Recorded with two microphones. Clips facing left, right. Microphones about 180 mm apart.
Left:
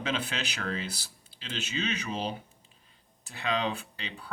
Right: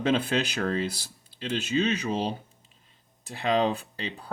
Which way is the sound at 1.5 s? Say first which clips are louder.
Right 8 dB; 35° right (ahead or behind).